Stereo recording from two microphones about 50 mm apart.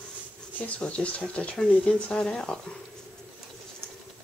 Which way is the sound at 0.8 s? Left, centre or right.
Left.